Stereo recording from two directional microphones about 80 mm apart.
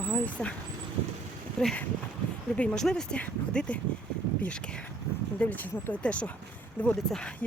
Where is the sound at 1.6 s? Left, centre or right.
Centre.